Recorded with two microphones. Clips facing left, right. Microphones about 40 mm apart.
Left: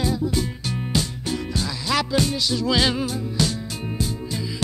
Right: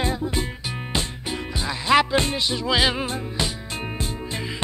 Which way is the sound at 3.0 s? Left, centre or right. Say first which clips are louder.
Left 2 dB; right.